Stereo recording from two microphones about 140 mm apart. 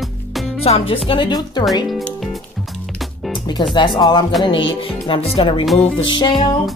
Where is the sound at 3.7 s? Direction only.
35° left (ahead or behind).